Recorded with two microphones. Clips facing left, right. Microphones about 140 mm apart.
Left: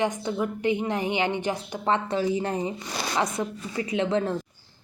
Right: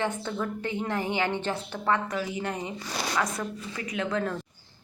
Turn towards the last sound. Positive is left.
turn(degrees=25)  # may be behind; listen again after turning